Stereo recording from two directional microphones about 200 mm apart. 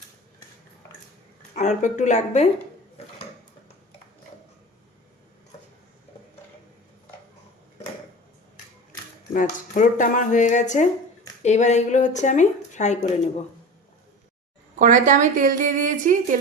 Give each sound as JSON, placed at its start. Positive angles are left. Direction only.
{"t": 1.5, "sound": "speech", "side_deg": 35}
{"t": 9.3, "sound": "speech", "side_deg": 40}
{"t": 14.8, "sound": "a woman's voice", "side_deg": -40}